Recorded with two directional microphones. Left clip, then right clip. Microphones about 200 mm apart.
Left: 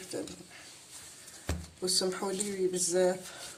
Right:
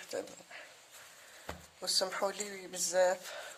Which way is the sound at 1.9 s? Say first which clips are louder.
Left 1 dB; 50° right (ahead or behind).